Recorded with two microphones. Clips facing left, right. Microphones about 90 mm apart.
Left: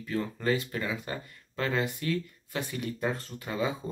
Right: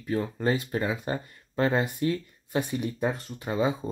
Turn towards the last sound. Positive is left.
turn(degrees=-30)  # may be behind; listen again after turning